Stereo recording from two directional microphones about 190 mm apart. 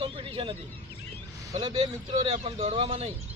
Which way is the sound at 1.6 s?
30° right (ahead or behind).